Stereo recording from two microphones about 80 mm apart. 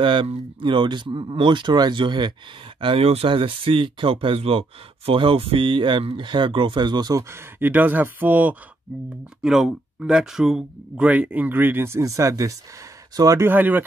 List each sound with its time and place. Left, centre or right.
0.0 s speech: right
2.8 s speech: right
7.2 s speech: right
9.4 s speech: centre; by 12.0 s right
12.0 s speech: right
13.4 s speech: right